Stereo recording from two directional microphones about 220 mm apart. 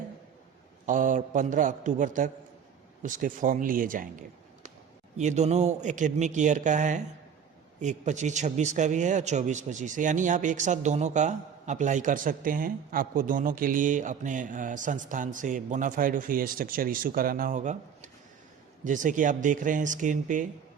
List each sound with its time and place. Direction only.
0.9 s a man's voice: 35° right (ahead or behind)
5.1 s a man's voice: 30° right (ahead or behind)